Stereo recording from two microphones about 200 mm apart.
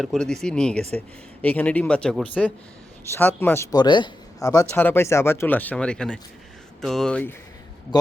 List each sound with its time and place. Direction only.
0.0 s a man's voice: centre (ahead or behind)